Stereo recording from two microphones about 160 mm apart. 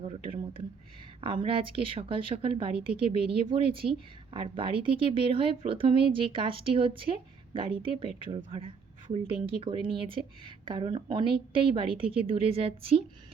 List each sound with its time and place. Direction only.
0.0 s a woman's voice: 35° right (ahead or behind)